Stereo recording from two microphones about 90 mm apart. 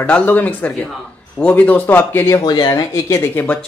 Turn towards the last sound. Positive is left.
turn(degrees=20)  # may be behind; listen again after turning